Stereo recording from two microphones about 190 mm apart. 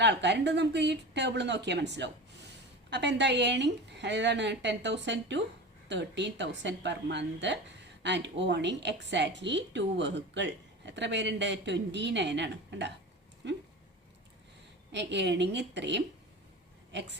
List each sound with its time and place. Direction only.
0.0 s a woman's voice: 65° right (ahead or behind)
14.9 s a woman's voice: 65° right (ahead or behind)